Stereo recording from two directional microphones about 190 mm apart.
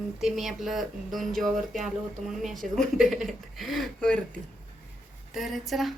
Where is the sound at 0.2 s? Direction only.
Centre (ahead or behind).